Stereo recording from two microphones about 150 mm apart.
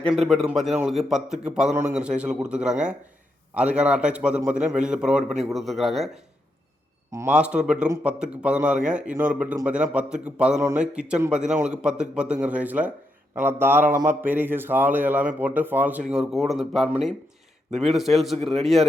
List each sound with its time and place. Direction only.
0.1 s a man's voice: centre (ahead or behind)
7.3 s a man's voice: 5° right (ahead or behind)
17.7 s a man's voice: 50° right (ahead or behind)
17.9 s a man's voice: centre (ahead or behind)